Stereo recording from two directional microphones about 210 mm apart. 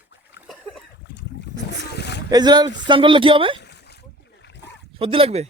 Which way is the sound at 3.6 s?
55° left (ahead or behind).